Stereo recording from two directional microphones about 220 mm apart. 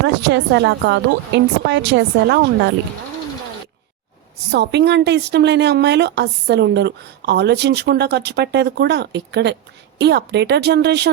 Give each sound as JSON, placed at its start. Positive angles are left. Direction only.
{"t": 0.1, "sound": "speech", "side_deg": -50}
{"t": 4.5, "sound": "speech", "side_deg": -50}